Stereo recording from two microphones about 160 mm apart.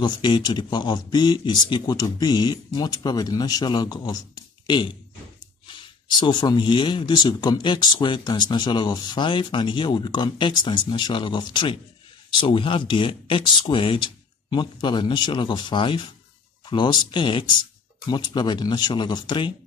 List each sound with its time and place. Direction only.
0.0 s speech: 30° left (ahead or behind)